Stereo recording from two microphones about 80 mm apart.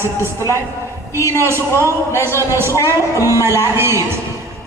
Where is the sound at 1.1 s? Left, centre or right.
Left.